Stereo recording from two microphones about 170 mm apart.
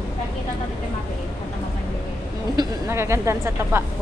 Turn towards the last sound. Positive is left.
turn(degrees=-15)  # may be behind; listen again after turning